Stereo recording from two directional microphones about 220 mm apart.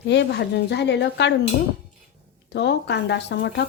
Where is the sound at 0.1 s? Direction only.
50° left (ahead or behind).